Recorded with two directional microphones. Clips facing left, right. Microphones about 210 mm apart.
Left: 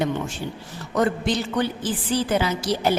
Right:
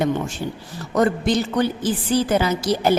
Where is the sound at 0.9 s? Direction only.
40° right (ahead or behind).